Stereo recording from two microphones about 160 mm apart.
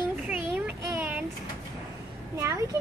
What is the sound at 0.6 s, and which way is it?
Child singing, 10° right (ahead or behind).